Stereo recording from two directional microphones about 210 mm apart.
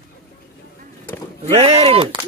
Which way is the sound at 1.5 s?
30° right (ahead or behind).